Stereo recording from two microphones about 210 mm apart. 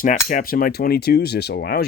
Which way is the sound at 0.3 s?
40° left (ahead or behind).